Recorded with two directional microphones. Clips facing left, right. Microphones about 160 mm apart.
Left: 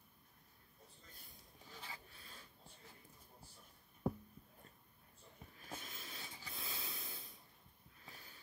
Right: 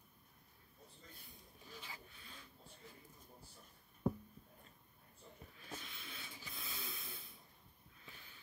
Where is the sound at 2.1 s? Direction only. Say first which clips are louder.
Right 1 dB; 35° left (ahead or behind).